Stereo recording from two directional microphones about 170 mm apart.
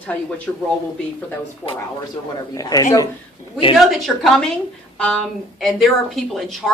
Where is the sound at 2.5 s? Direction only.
20° left (ahead or behind).